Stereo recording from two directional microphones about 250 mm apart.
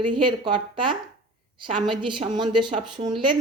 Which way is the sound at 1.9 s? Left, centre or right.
Centre.